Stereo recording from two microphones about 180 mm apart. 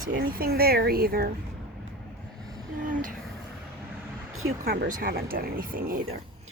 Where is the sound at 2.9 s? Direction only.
45° right (ahead or behind).